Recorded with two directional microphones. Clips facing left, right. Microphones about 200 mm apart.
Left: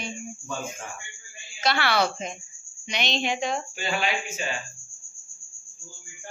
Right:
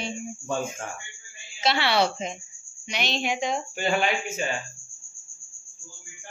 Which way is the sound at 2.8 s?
5° right (ahead or behind).